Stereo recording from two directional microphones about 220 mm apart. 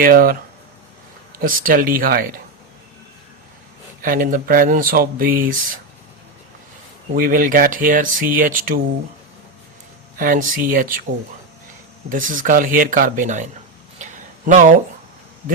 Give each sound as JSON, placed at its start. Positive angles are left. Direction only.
{"t": 0.0, "sound": "speech", "side_deg": -40}
{"t": 1.4, "sound": "speech", "side_deg": -40}
{"t": 4.0, "sound": "speech", "side_deg": -40}
{"t": 7.1, "sound": "speech", "side_deg": -40}
{"t": 10.2, "sound": "speech", "side_deg": -40}
{"t": 12.0, "sound": "speech", "side_deg": -40}
{"t": 14.0, "sound": "a sound", "side_deg": -35}